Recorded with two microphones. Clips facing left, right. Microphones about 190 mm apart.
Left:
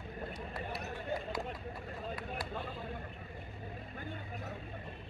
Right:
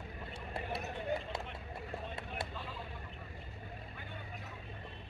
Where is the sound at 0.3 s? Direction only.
25° right (ahead or behind).